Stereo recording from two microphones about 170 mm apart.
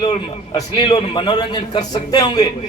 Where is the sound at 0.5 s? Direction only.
25° left (ahead or behind).